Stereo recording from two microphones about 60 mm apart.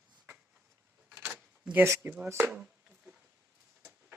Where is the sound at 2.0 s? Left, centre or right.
Right.